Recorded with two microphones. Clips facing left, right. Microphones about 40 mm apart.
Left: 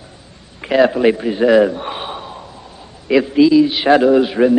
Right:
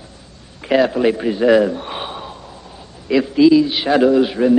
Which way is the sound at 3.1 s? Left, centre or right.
Centre.